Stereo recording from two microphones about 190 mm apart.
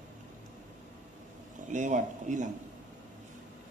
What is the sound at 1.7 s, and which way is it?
Speech, 40° right (ahead or behind).